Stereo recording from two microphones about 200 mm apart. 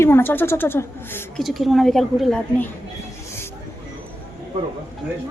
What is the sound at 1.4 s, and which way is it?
A woman's voice, centre (ahead or behind).